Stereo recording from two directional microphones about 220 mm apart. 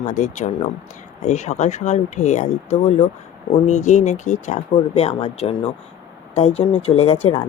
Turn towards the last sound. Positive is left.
turn(degrees=25)  # may be behind; listen again after turning